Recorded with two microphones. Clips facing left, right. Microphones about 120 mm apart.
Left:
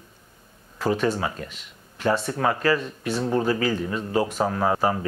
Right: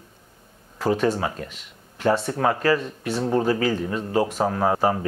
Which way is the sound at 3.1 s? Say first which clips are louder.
Right 2 dB; 30° right (ahead or behind).